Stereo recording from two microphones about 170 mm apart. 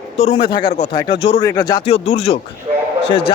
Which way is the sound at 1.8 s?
35° left (ahead or behind).